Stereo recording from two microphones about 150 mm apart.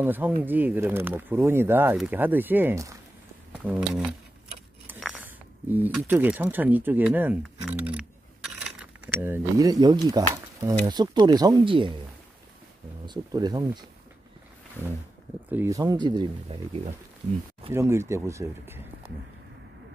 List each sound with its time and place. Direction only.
0.0 s speech: 10° right (ahead or behind)
3.5 s a sound: 5° right (ahead or behind)
5.2 s a sound: 10° right (ahead or behind)
6.0 s speech: 15° right (ahead or behind)
9.7 s speech: 25° right (ahead or behind)
10.3 s a sound: 20° right (ahead or behind)
10.9 s speech: 30° right (ahead or behind)
13.0 s speech: 30° right (ahead or behind)
15.5 s speech: 20° right (ahead or behind); by 16.9 s 40° right (ahead or behind)
17.6 s speech: 15° right (ahead or behind)